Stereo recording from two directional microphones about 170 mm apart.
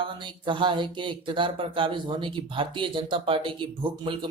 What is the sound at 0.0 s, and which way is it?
Speech, 30° right (ahead or behind).